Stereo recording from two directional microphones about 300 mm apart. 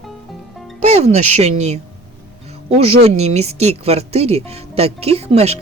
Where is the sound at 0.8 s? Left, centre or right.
Right.